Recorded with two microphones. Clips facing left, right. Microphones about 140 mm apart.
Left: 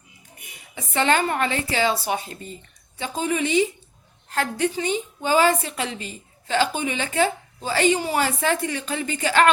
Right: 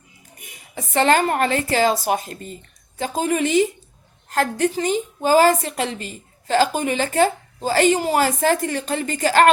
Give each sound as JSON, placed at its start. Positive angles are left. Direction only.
{"t": 0.8, "sound": "a woman's voice", "side_deg": -40}